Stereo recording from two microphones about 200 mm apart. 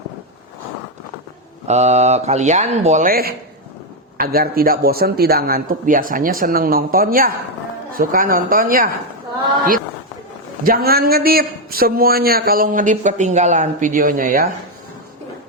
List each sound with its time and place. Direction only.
1.6 s a man's voice: 35° right (ahead or behind)
10.6 s a man's voice: 50° right (ahead or behind)